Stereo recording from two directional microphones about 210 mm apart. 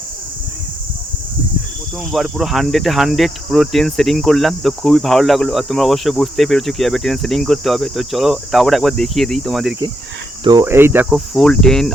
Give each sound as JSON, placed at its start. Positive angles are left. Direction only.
{"t": 2.1, "sound": "cricket", "side_deg": 0}
{"t": 10.4, "sound": "cricket", "side_deg": -15}
{"t": 11.3, "sound": "cricket", "side_deg": 0}